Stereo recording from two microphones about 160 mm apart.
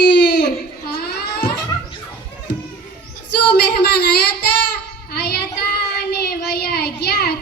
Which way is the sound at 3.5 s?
85° left.